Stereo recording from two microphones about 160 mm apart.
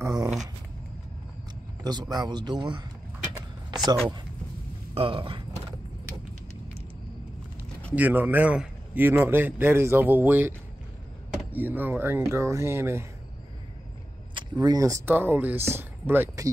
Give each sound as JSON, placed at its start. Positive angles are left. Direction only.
{"t": 0.0, "sound": "a sound", "side_deg": -20}
{"t": 1.8, "sound": "speech", "side_deg": -25}
{"t": 4.9, "sound": "speech", "side_deg": -35}
{"t": 7.9, "sound": "a man's voice", "side_deg": -10}
{"t": 11.5, "sound": "a man's voice", "side_deg": -10}
{"t": 14.3, "sound": "speech", "side_deg": -30}